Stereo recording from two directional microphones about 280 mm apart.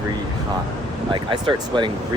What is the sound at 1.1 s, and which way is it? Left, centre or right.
Speech, centre.